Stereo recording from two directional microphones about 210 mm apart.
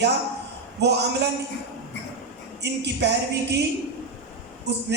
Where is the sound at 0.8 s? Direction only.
55° right (ahead or behind).